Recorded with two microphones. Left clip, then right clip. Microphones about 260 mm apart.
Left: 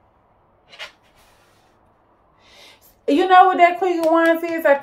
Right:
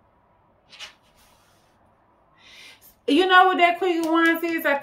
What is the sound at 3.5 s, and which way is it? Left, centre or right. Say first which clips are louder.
Speech: left 4 dB; right.